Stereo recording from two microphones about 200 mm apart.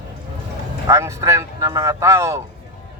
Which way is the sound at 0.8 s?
15° right (ahead or behind).